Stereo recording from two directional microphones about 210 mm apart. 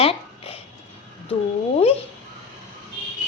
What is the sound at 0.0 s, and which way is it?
Babbling, 25° left (ahead or behind).